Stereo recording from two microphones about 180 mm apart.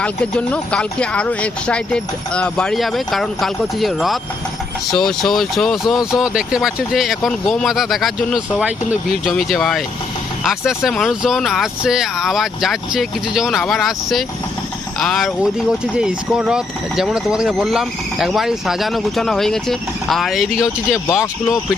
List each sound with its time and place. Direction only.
0.0 s speech: 5° left (ahead or behind)
21.1 s speech: 20° left (ahead or behind)